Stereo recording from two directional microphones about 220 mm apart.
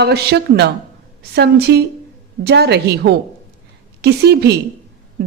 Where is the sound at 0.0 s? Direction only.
50° right (ahead or behind).